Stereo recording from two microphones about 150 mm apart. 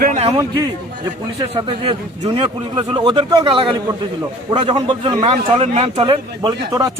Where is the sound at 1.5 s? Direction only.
35° right (ahead or behind).